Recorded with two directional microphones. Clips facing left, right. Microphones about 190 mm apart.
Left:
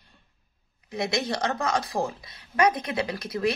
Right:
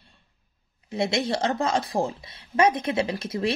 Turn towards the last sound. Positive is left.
turn(degrees=-25)  # may be behind; listen again after turning